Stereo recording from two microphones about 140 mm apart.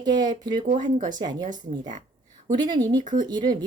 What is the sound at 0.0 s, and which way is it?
Speech, 30° right (ahead or behind).